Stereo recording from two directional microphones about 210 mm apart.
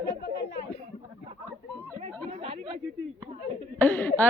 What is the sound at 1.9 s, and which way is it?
Chatter, 30° right (ahead or behind).